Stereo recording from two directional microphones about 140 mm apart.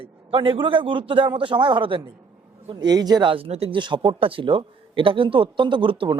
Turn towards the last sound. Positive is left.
turn(degrees=-35)  # may be behind; listen again after turning